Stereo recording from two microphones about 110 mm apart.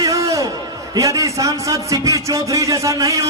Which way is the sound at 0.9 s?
30° right (ahead or behind).